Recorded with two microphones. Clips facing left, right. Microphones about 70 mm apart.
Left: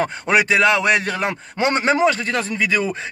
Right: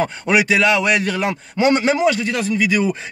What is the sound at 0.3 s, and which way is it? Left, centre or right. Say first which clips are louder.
A man's voice: even; left.